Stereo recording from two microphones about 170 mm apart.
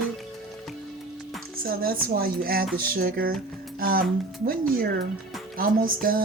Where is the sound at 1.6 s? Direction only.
60° right (ahead or behind).